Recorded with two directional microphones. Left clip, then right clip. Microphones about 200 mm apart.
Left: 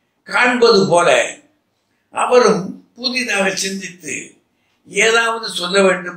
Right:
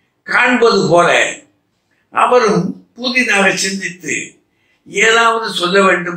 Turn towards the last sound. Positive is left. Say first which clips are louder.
# right 3 dB
turn(degrees=40)  # may be behind; listen again after turning